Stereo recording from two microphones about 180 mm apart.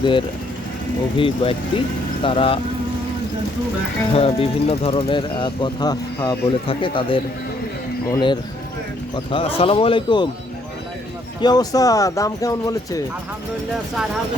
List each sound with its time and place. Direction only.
0.0 s speech: 25° left (ahead or behind)
4.1 s speech: 30° left (ahead or behind)
11.3 s speech: 20° left (ahead or behind)